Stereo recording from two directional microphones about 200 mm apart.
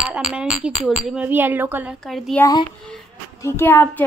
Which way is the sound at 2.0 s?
Centre (ahead or behind).